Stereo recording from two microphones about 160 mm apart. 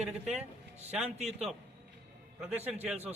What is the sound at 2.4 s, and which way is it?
Speech, 5° right (ahead or behind).